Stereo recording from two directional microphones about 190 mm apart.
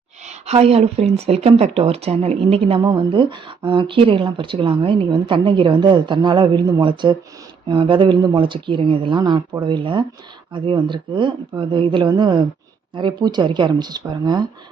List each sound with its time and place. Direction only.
0.4 s speech: 35° right (ahead or behind)